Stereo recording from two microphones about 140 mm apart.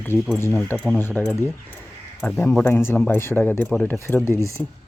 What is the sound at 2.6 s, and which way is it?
Speech, 15° left (ahead or behind).